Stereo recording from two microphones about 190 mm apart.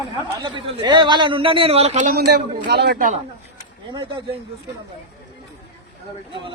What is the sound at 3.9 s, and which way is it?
Speech, 25° right (ahead or behind).